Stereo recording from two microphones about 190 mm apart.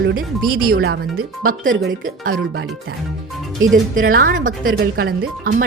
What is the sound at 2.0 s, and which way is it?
Speech, 50° right (ahead or behind).